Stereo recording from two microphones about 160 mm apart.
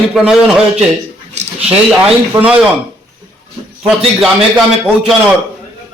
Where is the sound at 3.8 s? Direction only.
Centre (ahead or behind).